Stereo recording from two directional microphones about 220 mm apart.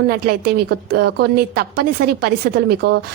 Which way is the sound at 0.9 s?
45° right (ahead or behind).